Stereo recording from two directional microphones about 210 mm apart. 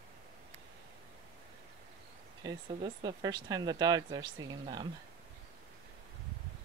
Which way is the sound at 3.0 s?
20° right (ahead or behind).